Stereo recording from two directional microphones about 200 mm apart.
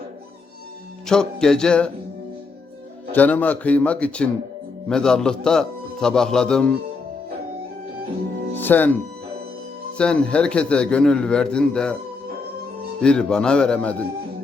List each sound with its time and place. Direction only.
1.0 s a man's voice: 5° left (ahead or behind)
3.1 s a man's voice: 10° left (ahead or behind)
8.5 s speech: 10° left (ahead or behind)
10.0 s a man's voice: 5° left (ahead or behind)
13.0 s a man's voice: 5° left (ahead or behind)